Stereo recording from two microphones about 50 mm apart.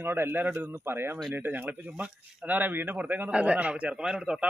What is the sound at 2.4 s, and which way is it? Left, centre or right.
Speech, right.